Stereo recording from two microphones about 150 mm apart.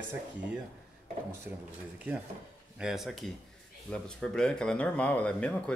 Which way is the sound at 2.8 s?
5° right (ahead or behind).